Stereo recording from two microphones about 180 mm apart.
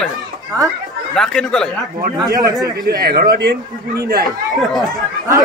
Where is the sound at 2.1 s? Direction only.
20° right (ahead or behind).